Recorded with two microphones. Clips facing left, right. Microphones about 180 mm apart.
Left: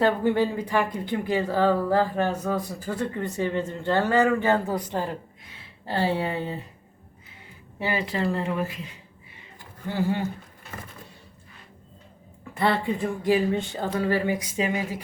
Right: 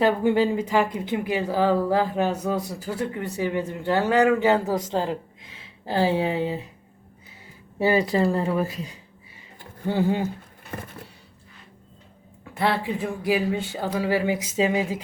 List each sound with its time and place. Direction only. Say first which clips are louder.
0.0 s speech: right 2 dB; 10° right (ahead or behind)
5.8 s speech: right 3 dB; 10° right (ahead or behind)
7.8 s speech: right 7 dB; 40° right (ahead or behind)
9.8 s speech: right 3 dB; 20° right (ahead or behind)
12.5 s speech: even; 5° right (ahead or behind)
14.4 s speech: right 4 dB; 25° right (ahead or behind)